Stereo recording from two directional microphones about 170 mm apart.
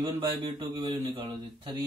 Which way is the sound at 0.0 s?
25° right (ahead or behind).